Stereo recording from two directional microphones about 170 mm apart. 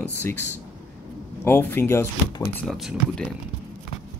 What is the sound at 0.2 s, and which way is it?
Speech, 15° left (ahead or behind).